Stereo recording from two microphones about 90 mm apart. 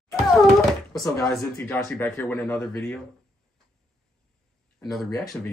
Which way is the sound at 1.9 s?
20° left (ahead or behind).